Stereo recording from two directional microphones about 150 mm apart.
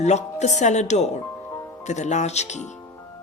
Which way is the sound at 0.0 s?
50° left (ahead or behind).